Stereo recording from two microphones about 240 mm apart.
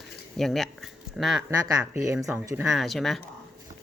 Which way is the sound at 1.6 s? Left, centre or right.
Centre.